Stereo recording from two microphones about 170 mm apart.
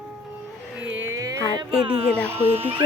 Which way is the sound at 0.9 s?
15° right (ahead or behind).